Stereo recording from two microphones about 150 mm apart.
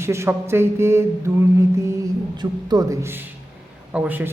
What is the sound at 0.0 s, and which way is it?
A man's voice, 15° right (ahead or behind).